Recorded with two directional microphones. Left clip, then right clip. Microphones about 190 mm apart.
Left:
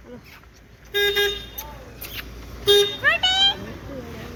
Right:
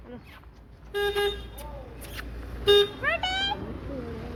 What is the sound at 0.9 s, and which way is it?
Vehicle, 50° left (ahead or behind).